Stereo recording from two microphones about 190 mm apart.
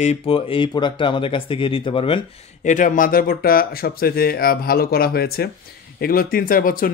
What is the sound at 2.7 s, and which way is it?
Speech, 45° left (ahead or behind).